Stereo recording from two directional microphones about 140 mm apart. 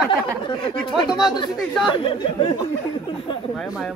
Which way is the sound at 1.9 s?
40° left (ahead or behind).